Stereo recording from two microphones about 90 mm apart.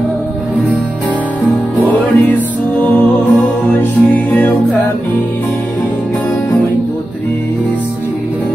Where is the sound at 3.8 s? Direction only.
20° left (ahead or behind).